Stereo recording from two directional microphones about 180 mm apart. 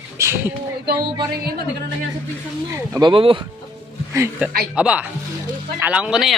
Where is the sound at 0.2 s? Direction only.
15° right (ahead or behind).